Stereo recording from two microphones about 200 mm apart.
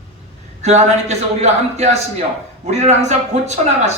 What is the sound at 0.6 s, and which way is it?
Speech, 35° right (ahead or behind).